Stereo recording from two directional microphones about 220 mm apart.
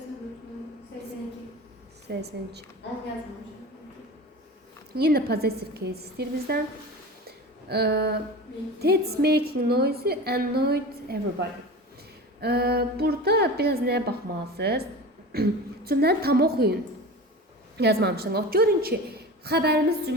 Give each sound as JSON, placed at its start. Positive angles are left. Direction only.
{"t": 2.0, "sound": "a woman's voice", "side_deg": -50}
{"t": 4.9, "sound": "a woman's voice", "side_deg": -45}
{"t": 7.3, "sound": "a sound", "side_deg": -45}
{"t": 8.8, "sound": "a woman's voice", "side_deg": -45}
{"t": 17.7, "sound": "a woman's voice", "side_deg": -50}